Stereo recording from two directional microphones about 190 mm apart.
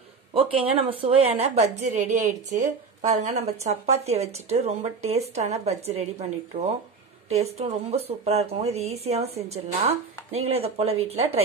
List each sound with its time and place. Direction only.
0.3 s a woman's voice: 30° right (ahead or behind)